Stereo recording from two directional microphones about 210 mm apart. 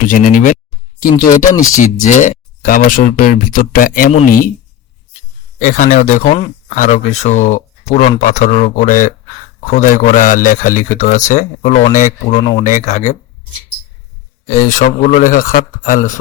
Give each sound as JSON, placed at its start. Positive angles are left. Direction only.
{"t": 0.1, "sound": "speech", "side_deg": 40}
{"t": 5.6, "sound": "speech", "side_deg": 35}
{"t": 14.4, "sound": "speech", "side_deg": 35}